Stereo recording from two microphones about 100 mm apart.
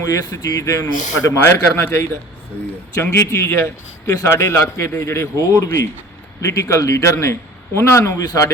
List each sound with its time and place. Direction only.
0.3 s a man's voice: 35° left (ahead or behind)